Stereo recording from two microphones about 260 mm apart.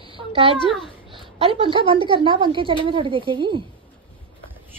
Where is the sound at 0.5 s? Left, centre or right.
Centre.